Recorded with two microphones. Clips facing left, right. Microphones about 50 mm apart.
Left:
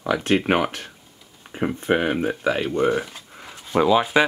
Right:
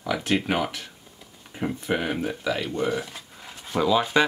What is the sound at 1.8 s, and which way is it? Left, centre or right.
Speech, left.